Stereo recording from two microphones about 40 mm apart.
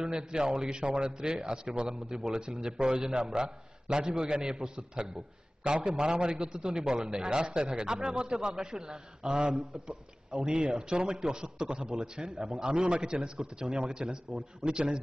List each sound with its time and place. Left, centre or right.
0.0 s a man's voice: right
9.3 s a man's voice: right
12.7 s a man's voice: right
13.0 s a man's voice: right